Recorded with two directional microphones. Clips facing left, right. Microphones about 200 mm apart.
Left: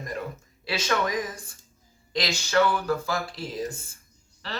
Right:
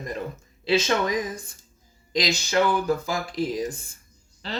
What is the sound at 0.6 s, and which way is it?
Speech, 20° right (ahead or behind).